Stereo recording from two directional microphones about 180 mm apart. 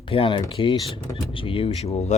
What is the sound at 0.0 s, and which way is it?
Speech, 30° left (ahead or behind).